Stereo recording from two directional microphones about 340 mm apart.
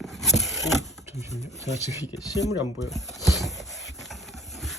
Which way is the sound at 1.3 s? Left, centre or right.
Centre.